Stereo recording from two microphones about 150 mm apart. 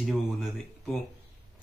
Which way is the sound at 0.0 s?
Centre (ahead or behind).